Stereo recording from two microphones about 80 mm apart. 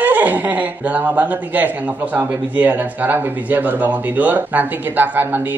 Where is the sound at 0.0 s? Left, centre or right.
Centre.